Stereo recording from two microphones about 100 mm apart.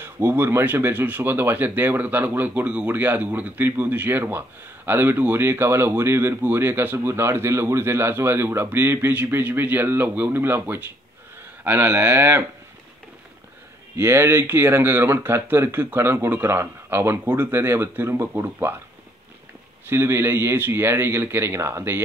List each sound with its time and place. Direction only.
0.0 s speech: 25° right (ahead or behind)
13.9 s speech: 25° right (ahead or behind)
19.9 s speech: 25° right (ahead or behind)